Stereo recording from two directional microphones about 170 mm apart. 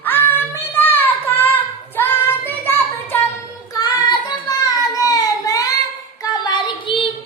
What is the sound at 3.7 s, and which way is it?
Child singing, 25° left (ahead or behind).